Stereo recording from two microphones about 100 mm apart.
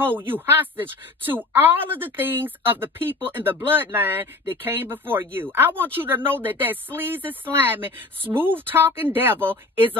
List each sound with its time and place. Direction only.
0.0 s speech: 20° right (ahead or behind)